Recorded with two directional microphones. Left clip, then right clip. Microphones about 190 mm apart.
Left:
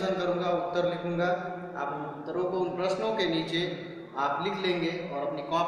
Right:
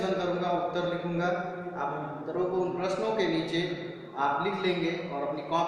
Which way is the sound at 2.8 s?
20° left (ahead or behind).